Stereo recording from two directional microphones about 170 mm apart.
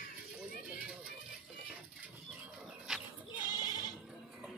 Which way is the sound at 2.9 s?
5° right (ahead or behind).